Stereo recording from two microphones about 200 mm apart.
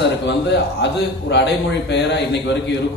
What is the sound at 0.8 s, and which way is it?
A man's voice, 60° left (ahead or behind).